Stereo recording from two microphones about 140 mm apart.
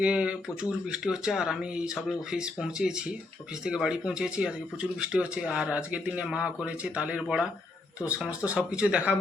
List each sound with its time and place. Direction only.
0.0 s speech: 10° right (ahead or behind)